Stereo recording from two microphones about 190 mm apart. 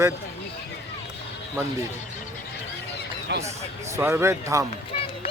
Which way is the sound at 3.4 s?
15° right (ahead or behind).